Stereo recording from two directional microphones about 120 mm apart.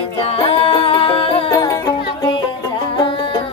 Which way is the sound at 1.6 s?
35° left (ahead or behind).